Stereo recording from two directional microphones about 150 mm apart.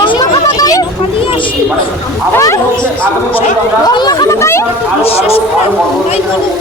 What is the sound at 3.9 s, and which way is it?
Speech, 30° left (ahead or behind).